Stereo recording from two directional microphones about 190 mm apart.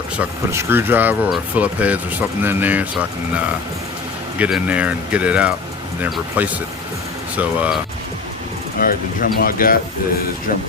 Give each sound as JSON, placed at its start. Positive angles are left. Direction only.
{"t": 0.2, "sound": "speech", "side_deg": -10}
{"t": 4.4, "sound": "speech", "side_deg": -5}
{"t": 8.8, "sound": "speech", "side_deg": 50}